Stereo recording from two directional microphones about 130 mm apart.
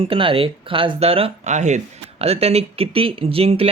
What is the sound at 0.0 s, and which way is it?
Speech, 45° right (ahead or behind).